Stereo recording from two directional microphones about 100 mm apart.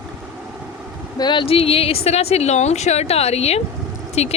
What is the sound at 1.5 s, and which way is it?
Speech, 70° left (ahead or behind).